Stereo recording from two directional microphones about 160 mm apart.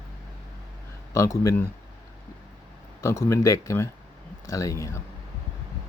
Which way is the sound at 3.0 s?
20° left (ahead or behind).